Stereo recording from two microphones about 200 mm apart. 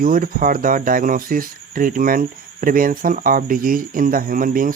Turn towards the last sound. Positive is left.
turn(degrees=-45)  # may be behind; listen again after turning